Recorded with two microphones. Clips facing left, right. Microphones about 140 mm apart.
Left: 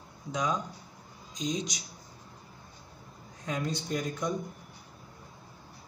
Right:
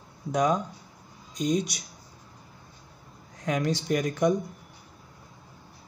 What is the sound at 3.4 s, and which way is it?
Speech, 80° right.